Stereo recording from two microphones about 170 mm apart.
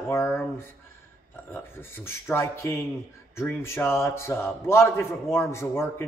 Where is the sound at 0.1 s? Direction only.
15° left (ahead or behind).